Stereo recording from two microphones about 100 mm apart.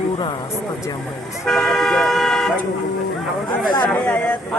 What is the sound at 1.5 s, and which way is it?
Speech, centre (ahead or behind).